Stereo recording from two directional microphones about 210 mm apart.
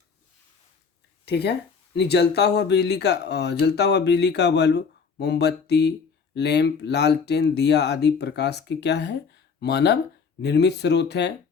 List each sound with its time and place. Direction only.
1.2 s speech: 50° left (ahead or behind)